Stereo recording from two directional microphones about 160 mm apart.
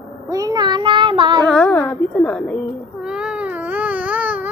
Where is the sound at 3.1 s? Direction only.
5° right (ahead or behind).